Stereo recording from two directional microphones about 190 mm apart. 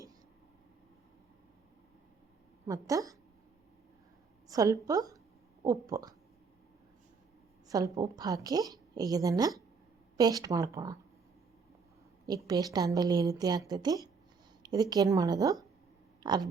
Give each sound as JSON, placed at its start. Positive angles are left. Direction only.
{"t": 2.6, "sound": "a woman's voice", "side_deg": -20}
{"t": 4.4, "sound": "a woman's voice", "side_deg": -15}
{"t": 7.7, "sound": "a woman's voice", "side_deg": -20}
{"t": 12.5, "sound": "a woman's voice", "side_deg": -20}